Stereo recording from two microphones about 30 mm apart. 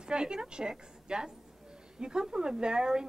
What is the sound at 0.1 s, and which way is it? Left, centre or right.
Speech, right.